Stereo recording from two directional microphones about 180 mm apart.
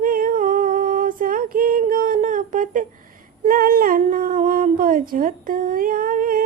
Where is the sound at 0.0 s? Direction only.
50° right (ahead or behind).